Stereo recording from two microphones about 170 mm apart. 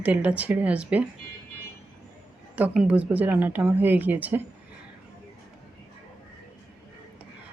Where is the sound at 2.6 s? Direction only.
5° right (ahead or behind).